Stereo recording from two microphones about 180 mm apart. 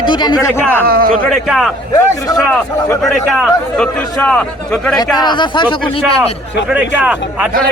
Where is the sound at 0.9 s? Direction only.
55° right (ahead or behind).